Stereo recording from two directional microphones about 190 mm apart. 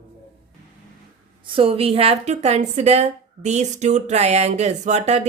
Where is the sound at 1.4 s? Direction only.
30° right (ahead or behind).